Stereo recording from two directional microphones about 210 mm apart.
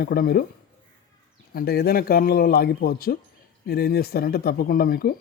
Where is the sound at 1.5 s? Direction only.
50° left (ahead or behind).